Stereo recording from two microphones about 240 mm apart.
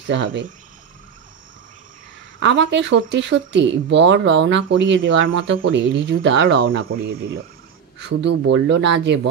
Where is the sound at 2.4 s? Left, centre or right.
Right.